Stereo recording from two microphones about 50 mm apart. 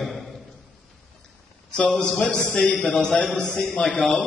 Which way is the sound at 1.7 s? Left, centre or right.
Left.